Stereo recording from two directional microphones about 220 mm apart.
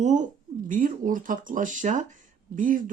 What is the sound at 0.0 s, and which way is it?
Speech, 35° right (ahead or behind).